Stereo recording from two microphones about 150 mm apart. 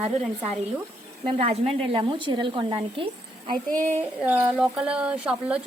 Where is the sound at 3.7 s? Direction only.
55° right (ahead or behind).